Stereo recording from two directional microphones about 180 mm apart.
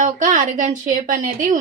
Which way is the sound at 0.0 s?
45° right (ahead or behind).